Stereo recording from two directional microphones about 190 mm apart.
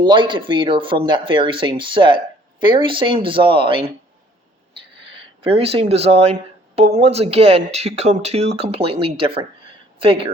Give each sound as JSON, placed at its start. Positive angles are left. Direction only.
{"t": 0.0, "sound": "speech", "side_deg": -25}
{"t": 5.1, "sound": "speech", "side_deg": -30}